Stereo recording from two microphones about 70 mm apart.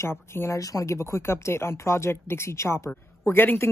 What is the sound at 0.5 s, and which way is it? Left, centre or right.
Speech, left.